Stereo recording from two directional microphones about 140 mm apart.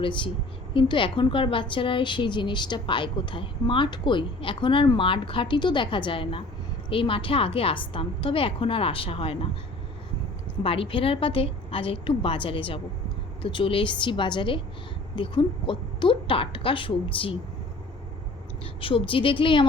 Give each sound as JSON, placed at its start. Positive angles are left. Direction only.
{"t": 0.0, "sound": "a woman's voice", "side_deg": 35}
{"t": 10.6, "sound": "a woman's voice", "side_deg": 40}
{"t": 18.6, "sound": "a woman's voice", "side_deg": 40}